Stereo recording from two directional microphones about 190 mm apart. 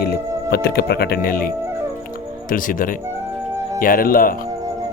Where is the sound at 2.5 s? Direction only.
45° left (ahead or behind).